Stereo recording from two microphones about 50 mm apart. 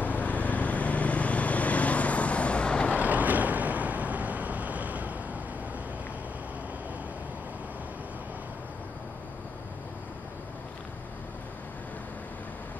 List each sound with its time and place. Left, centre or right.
0.0 s vehicle: left
3.0 s vehicle: right